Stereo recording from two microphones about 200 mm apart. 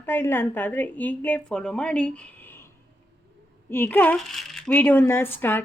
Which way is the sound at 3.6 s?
10° left (ahead or behind).